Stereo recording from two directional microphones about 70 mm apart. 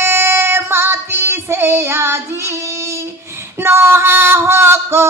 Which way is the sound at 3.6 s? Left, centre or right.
Right.